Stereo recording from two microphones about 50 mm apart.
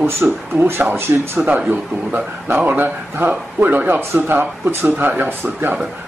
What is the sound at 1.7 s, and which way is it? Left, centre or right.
Speech, right.